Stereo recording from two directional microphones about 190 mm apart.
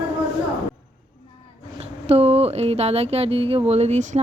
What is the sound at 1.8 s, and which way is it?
Speech, 30° right (ahead or behind).